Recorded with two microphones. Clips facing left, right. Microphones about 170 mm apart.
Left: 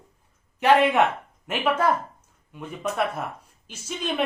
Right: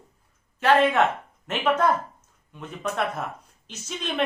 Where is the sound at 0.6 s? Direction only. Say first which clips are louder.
Left 1 dB; 15° left (ahead or behind).